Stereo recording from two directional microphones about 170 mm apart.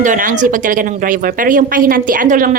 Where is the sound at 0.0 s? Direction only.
50° right (ahead or behind).